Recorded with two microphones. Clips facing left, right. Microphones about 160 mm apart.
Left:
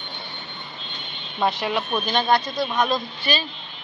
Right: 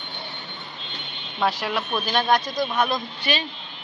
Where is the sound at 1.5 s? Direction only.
Centre (ahead or behind).